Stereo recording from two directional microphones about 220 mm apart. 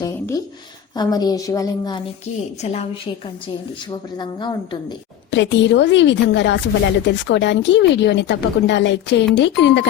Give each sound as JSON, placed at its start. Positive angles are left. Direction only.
{"t": 0.0, "sound": "a woman's voice", "side_deg": 15}
{"t": 2.6, "sound": "a woman's voice", "side_deg": 30}
{"t": 5.3, "sound": "a woman's voice", "side_deg": 55}